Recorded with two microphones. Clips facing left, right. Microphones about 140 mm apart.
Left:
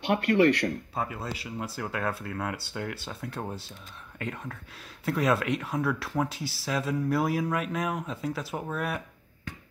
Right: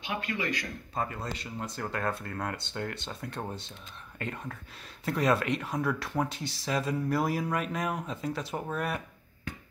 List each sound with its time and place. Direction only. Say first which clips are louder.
0.0 s speech: left 12 dB; 65° left (ahead or behind)
0.9 s speech: left 1 dB; 5° left (ahead or behind)